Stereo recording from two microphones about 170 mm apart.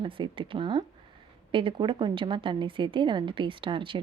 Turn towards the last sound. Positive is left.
turn(degrees=-30)  # may be behind; listen again after turning